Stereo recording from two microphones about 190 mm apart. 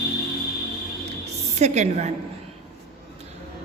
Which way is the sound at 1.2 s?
35° right (ahead or behind).